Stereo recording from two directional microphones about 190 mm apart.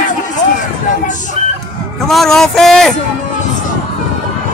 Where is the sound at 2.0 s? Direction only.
Centre (ahead or behind).